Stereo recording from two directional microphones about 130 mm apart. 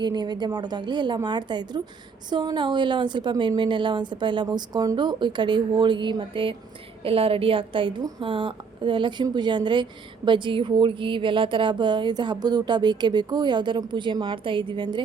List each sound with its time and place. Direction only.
0.0 s speech: 35° right (ahead or behind)